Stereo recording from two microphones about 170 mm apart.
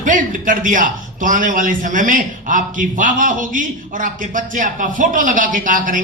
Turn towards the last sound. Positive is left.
turn(degrees=-50)  # may be behind; listen again after turning